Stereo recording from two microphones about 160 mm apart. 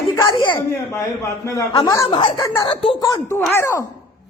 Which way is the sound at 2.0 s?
35° left (ahead or behind).